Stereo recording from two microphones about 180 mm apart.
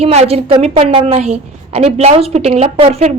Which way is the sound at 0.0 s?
35° right (ahead or behind).